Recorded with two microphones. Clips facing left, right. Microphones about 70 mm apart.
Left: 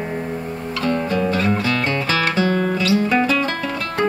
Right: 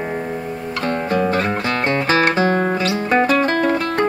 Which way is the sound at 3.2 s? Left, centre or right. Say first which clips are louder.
Right 4 dB; right.